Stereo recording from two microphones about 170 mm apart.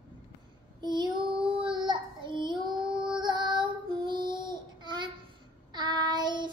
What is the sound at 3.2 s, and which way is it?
Child singing, 25° right (ahead or behind).